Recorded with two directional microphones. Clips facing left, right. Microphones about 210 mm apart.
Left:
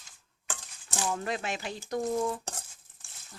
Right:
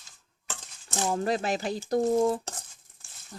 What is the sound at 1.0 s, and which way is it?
Speech, 35° right (ahead or behind).